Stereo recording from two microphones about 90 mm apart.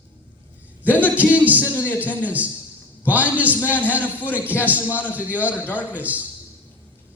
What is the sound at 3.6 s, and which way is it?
Speech, 20° left (ahead or behind).